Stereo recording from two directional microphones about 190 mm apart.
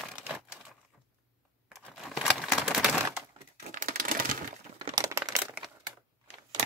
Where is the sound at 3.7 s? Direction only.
45° right (ahead or behind).